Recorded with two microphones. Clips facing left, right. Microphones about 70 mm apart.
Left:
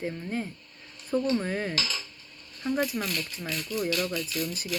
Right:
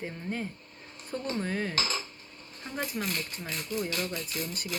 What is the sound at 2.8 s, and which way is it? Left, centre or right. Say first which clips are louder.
Speech: left 3 dB; right.